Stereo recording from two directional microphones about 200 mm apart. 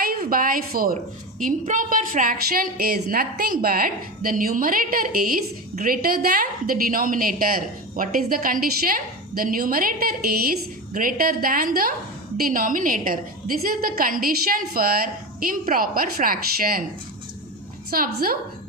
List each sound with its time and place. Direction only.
0.0 s a woman's voice: 45° right (ahead or behind)
17.9 s a woman's voice: 45° right (ahead or behind)